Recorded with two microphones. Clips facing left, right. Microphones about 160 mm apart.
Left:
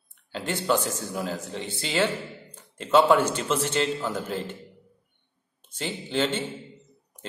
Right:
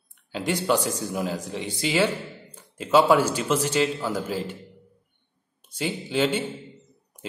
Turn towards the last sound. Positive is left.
turn(degrees=-10)  # may be behind; listen again after turning